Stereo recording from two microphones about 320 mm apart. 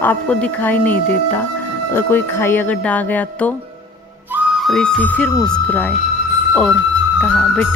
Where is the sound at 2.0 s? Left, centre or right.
Centre.